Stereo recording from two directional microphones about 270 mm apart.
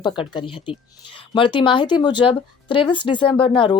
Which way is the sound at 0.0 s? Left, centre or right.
Centre.